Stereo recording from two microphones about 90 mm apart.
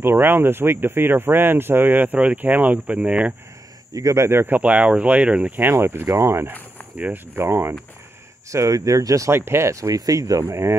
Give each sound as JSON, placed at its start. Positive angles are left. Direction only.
{"t": 0.0, "sound": "speech", "side_deg": -25}
{"t": 3.9, "sound": "speech", "side_deg": -35}
{"t": 5.7, "sound": "speech", "side_deg": -25}
{"t": 8.5, "sound": "speech", "side_deg": -40}
{"t": 10.4, "sound": "speech", "side_deg": -30}